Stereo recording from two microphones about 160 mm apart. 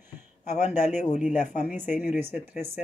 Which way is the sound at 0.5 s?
45° left (ahead or behind).